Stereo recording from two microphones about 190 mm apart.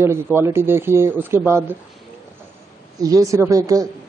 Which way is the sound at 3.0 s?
20° right (ahead or behind).